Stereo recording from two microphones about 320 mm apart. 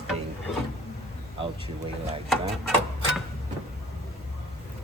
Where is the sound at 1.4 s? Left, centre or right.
Centre.